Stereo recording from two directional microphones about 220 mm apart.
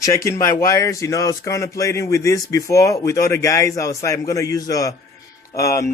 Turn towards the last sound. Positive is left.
turn(degrees=15)  # may be behind; listen again after turning